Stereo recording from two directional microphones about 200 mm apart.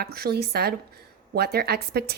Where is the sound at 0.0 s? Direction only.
50° right (ahead or behind).